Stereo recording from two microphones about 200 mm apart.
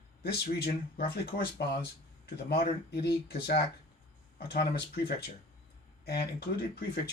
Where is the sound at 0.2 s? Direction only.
55° left (ahead or behind).